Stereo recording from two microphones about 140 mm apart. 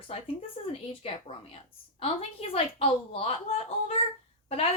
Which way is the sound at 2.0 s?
45° left (ahead or behind).